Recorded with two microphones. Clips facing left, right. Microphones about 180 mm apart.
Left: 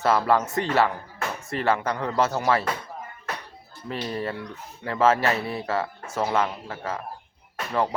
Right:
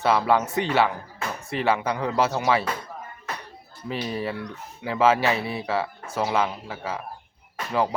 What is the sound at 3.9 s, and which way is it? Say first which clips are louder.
Speech: right 1 dB; 10° right (ahead or behind).